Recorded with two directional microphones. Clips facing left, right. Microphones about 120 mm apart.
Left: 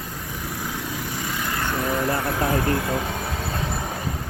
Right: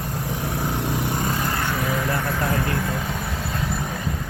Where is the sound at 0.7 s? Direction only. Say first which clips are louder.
Right 6 dB; 60° right (ahead or behind).